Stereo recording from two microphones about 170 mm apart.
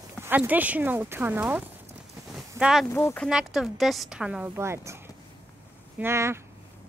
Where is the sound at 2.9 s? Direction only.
15° left (ahead or behind).